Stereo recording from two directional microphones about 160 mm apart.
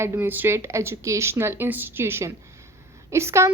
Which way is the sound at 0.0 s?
15° right (ahead or behind).